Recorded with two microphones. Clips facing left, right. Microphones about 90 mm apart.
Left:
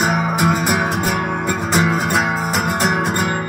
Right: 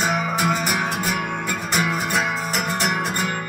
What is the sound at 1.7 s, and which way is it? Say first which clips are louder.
Music: left 5 dB; 30° left (ahead or behind).